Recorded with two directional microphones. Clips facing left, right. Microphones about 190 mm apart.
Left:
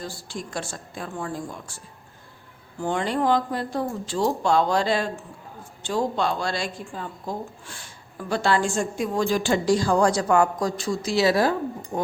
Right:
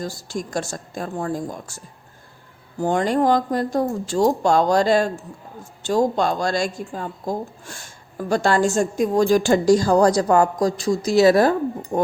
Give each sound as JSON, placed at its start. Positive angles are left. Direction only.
{"t": 0.0, "sound": "speech", "side_deg": -40}